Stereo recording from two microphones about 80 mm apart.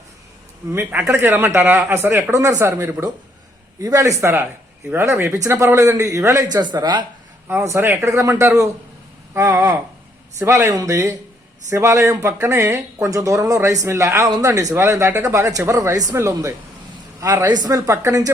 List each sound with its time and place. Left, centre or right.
1.0 s speech: right
2.3 s speech: right
7.8 s speech: right
17.4 s speech: right